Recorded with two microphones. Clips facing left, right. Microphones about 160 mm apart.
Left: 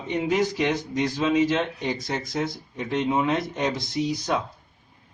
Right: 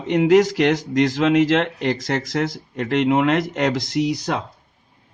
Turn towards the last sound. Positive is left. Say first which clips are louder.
# right 4 dB
turn(degrees=-90)